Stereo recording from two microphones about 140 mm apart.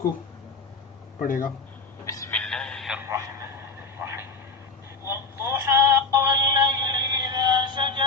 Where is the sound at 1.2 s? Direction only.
75° left (ahead or behind).